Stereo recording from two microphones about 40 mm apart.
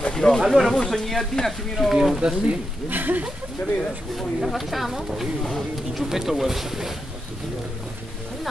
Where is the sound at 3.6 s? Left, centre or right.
Centre.